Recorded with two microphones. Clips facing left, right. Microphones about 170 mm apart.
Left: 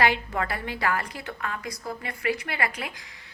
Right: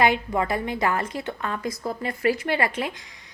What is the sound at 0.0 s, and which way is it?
Speech, 20° right (ahead or behind).